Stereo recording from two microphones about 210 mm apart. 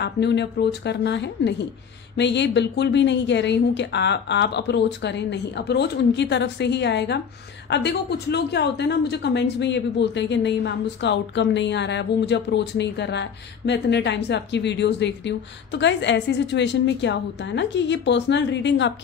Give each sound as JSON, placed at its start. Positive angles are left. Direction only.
{"t": 0.0, "sound": "a woman's voice", "side_deg": 55}